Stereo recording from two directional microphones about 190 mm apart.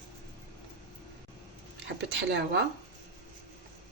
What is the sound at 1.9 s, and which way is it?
Speech, 65° right (ahead or behind).